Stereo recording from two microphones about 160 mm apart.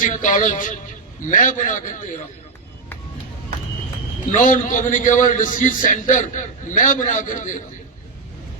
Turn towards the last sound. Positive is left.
turn(degrees=55)  # may be behind; listen again after turning